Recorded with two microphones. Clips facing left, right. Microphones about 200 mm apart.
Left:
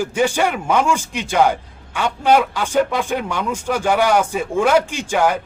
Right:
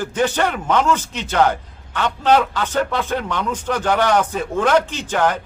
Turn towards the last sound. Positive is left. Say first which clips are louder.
# left 2 dB
turn(degrees=10)  # may be behind; listen again after turning